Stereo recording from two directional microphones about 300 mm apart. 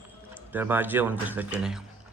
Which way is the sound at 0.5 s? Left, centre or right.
Centre.